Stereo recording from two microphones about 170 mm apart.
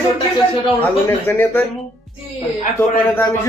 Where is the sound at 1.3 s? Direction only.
15° left (ahead or behind).